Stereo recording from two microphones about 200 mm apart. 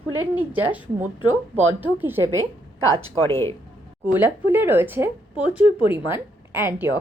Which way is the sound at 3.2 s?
15° left (ahead or behind).